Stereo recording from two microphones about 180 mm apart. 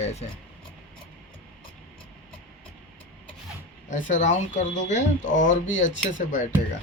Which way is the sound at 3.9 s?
45° left (ahead or behind).